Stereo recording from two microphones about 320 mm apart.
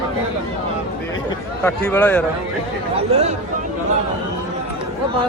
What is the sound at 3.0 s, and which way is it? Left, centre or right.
Speech, centre.